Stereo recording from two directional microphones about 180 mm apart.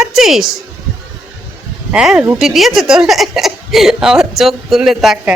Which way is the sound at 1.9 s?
5° right (ahead or behind).